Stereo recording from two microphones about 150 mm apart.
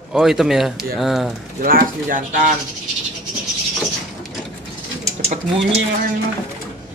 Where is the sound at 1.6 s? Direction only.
70° right (ahead or behind).